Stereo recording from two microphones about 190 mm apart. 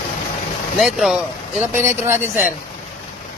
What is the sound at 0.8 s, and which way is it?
Speech, centre (ahead or behind).